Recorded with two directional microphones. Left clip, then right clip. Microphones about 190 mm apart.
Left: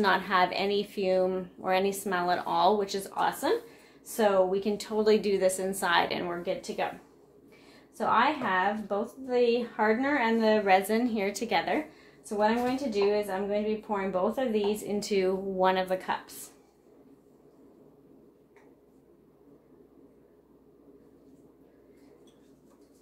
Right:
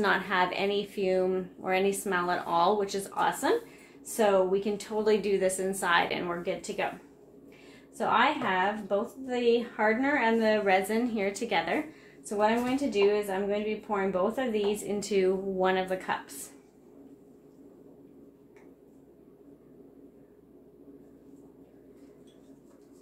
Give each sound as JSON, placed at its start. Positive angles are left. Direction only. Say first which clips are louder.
{"t": 0.0, "sound": "a woman's voice", "louder": "left 2 dB", "side_deg": 30}
{"t": 8.0, "sound": "a woman's voice", "louder": "even", "side_deg": 20}
{"t": 13.1, "sound": "a woman's voice", "louder": "even", "side_deg": 20}